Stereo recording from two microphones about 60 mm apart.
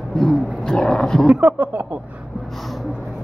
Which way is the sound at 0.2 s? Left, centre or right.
Centre.